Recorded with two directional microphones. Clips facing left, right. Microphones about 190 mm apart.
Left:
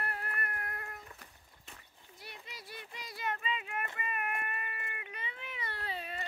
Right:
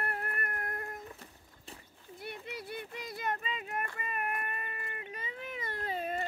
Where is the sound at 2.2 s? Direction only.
55° right (ahead or behind); by 3.8 s 40° right (ahead or behind).